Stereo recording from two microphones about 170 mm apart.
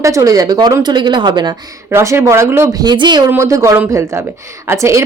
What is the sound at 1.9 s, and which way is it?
Speech, 15° right (ahead or behind).